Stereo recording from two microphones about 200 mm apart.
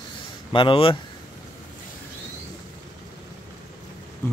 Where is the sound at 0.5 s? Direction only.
25° left (ahead or behind).